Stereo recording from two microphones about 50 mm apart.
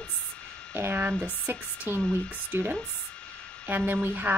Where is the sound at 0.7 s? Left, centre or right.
Right.